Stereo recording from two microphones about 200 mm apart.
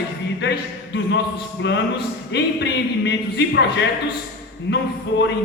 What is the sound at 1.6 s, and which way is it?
Speech, 60° left (ahead or behind).